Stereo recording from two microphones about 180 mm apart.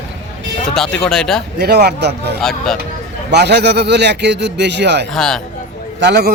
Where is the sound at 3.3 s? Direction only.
65° right (ahead or behind).